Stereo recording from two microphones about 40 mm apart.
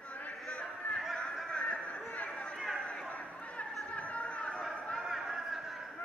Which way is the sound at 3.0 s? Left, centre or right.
Left.